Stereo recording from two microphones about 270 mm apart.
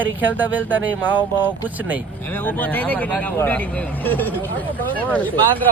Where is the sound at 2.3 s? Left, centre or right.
Centre.